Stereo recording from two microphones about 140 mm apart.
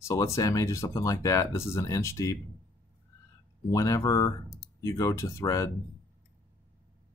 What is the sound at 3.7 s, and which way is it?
Speech, 25° left (ahead or behind).